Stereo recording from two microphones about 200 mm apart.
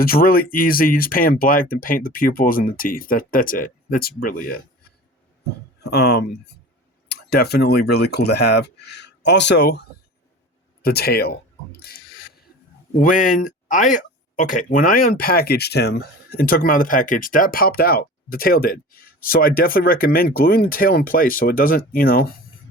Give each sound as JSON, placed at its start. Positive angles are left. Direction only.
{"t": 0.0, "sound": "speech", "side_deg": 45}
{"t": 5.8, "sound": "speech", "side_deg": 55}
{"t": 10.8, "sound": "speech", "side_deg": 50}
{"t": 11.8, "sound": "a sound", "side_deg": 50}
{"t": 13.0, "sound": "speech", "side_deg": 40}